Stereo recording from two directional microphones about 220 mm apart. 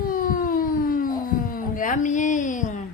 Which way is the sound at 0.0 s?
40° left (ahead or behind).